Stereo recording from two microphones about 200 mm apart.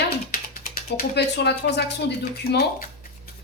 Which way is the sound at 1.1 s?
55° left (ahead or behind).